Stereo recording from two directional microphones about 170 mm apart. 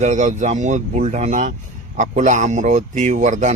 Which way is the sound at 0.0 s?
45° right (ahead or behind).